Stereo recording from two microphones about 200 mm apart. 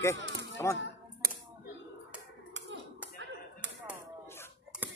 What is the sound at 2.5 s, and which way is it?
Clapping, 65° right (ahead or behind).